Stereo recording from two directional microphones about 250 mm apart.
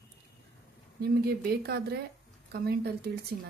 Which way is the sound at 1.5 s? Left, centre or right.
Right.